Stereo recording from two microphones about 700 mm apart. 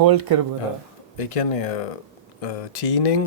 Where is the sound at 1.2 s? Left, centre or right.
Left.